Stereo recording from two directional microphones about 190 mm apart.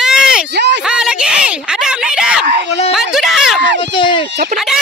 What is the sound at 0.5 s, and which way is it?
Speech, 65° right (ahead or behind).